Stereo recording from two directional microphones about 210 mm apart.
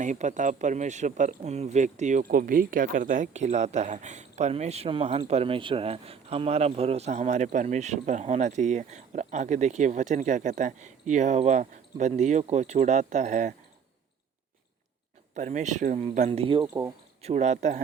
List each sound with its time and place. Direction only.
0.0 s speech: 35° right (ahead or behind)
15.4 s speech: 35° right (ahead or behind)
17.2 s speech: 35° right (ahead or behind)